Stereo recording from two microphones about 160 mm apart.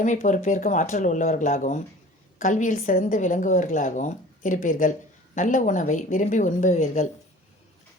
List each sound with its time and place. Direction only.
0.0 s speech: 50° left (ahead or behind)